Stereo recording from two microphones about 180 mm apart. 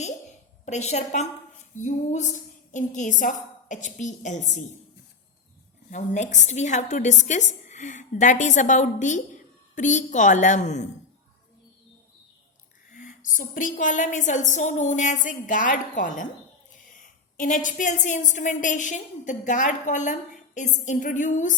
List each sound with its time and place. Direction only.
0.6 s a woman's voice: 40° left (ahead or behind)
5.9 s a woman's voice: 45° left (ahead or behind)
12.9 s a woman's voice: 50° left (ahead or behind)